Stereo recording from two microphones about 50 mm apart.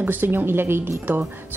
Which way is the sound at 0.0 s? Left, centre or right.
Right.